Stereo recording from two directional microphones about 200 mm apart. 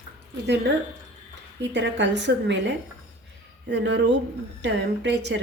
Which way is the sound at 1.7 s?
60° right (ahead or behind).